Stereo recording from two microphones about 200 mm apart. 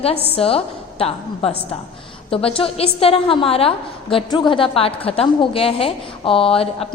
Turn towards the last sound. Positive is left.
turn(degrees=30)  # may be behind; listen again after turning